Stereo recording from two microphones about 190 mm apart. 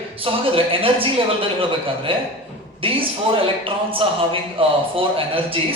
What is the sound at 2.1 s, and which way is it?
A man's voice, 30° right (ahead or behind).